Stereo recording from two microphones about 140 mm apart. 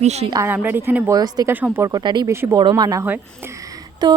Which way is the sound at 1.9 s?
30° right (ahead or behind).